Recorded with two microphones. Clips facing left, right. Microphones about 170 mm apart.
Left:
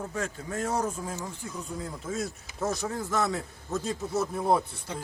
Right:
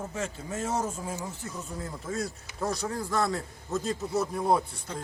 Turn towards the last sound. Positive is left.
turn(degrees=0)  # may be behind; listen again after turning